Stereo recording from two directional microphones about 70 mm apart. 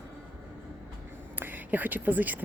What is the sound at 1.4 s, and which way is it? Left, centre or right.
Speech, right.